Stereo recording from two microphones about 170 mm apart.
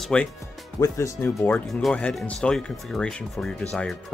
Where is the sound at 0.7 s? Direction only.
20° left (ahead or behind).